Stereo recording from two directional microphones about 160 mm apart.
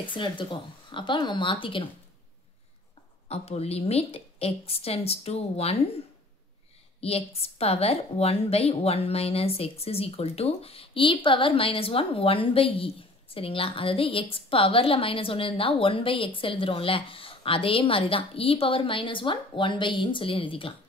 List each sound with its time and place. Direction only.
0.1 s a woman's voice: 30° left (ahead or behind)
3.3 s a woman's voice: 40° left (ahead or behind)
7.0 s a woman's voice: 40° left (ahead or behind)